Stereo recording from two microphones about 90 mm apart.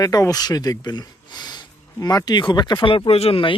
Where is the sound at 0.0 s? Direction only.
45° left (ahead or behind).